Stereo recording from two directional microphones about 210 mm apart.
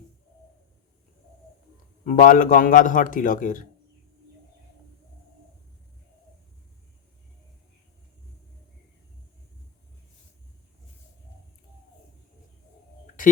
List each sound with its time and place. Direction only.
2.0 s a man's voice: 40° left (ahead or behind)